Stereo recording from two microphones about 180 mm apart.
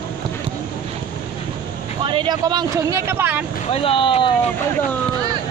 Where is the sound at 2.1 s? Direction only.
25° right (ahead or behind).